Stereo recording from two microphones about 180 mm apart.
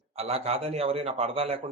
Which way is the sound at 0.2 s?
35° right (ahead or behind).